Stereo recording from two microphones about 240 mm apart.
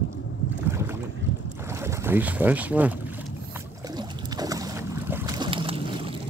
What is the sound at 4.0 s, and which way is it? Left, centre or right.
Boat, centre.